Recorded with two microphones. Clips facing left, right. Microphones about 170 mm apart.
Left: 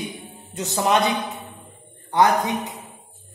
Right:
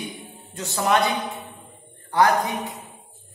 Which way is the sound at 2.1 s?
20° left (ahead or behind).